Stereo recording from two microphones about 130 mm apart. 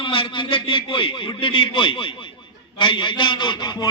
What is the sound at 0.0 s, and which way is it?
A man's voice, 40° left (ahead or behind).